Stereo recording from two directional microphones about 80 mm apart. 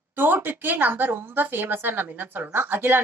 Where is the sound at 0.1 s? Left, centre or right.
Right.